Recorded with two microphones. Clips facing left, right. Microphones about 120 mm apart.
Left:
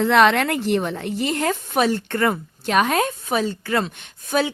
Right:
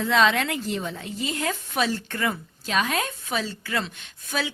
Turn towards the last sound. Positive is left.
turn(degrees=50)  # may be behind; listen again after turning